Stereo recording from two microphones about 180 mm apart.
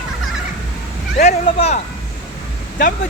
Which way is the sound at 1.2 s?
40° left (ahead or behind).